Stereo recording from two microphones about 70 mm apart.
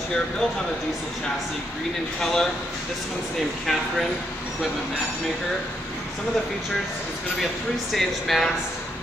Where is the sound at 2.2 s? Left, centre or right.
Centre.